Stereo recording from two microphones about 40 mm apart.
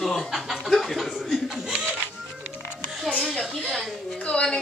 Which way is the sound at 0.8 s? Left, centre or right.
Centre.